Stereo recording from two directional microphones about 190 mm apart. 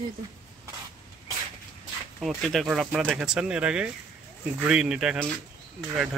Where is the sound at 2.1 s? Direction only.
Centre (ahead or behind).